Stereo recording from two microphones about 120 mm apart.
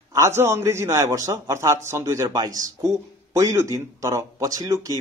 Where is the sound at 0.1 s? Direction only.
25° right (ahead or behind).